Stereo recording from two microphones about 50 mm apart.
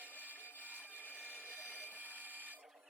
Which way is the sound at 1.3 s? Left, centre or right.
Left.